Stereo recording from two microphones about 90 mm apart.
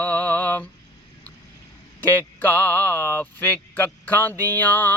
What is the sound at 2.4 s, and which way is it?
Music, 20° left (ahead or behind).